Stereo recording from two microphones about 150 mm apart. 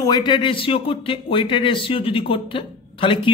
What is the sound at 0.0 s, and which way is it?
A woman's voice, 30° left (ahead or behind).